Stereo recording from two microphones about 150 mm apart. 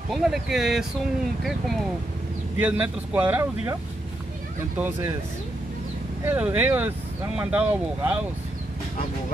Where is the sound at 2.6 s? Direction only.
10° right (ahead or behind).